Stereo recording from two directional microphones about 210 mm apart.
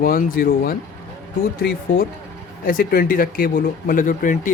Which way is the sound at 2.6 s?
45° left (ahead or behind).